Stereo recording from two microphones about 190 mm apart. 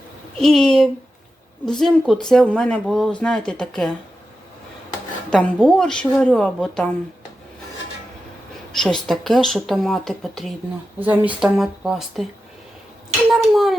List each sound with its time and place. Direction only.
0.3 s speech: centre (ahead or behind)
5.3 s speech: 5° left (ahead or behind)
8.7 s speech: centre (ahead or behind)
13.3 s speech: centre (ahead or behind)